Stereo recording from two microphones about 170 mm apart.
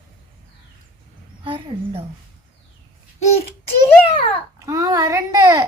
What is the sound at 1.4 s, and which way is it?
Speech, 30° right (ahead or behind).